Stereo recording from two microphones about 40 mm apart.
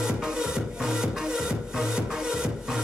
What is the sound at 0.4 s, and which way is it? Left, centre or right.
Music, centre.